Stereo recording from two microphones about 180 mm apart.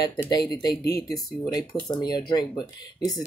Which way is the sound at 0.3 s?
20° left (ahead or behind).